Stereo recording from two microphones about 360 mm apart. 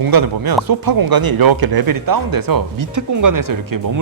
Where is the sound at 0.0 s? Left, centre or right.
Right.